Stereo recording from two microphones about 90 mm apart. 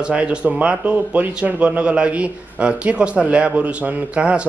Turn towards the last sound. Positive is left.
turn(degrees=-15)  # may be behind; listen again after turning